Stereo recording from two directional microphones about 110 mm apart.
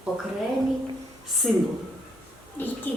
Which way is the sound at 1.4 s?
Centre (ahead or behind).